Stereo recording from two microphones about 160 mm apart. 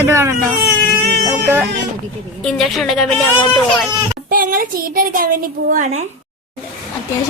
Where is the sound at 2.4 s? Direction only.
Centre (ahead or behind).